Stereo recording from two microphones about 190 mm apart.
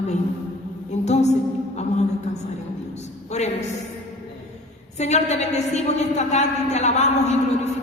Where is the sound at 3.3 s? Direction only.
35° left (ahead or behind).